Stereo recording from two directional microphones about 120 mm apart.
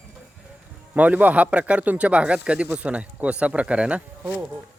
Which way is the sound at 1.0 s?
15° right (ahead or behind).